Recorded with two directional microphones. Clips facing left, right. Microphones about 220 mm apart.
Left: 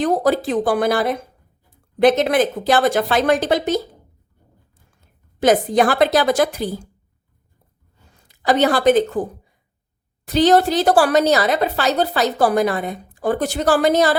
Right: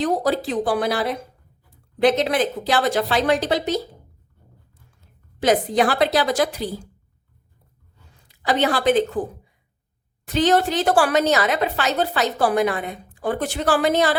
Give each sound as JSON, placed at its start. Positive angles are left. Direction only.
{"t": 0.0, "sound": "speech", "side_deg": 50}
{"t": 5.4, "sound": "speech", "side_deg": 45}
{"t": 8.3, "sound": "speech", "side_deg": 45}
{"t": 10.2, "sound": "a woman's voice", "side_deg": 40}